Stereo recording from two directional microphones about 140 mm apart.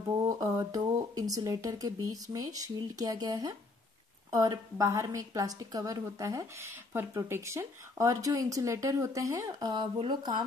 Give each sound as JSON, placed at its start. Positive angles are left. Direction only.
{"t": 0.3, "sound": "a woman's voice", "side_deg": -25}